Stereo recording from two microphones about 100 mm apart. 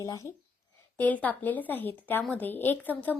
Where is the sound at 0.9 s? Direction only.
15° left (ahead or behind).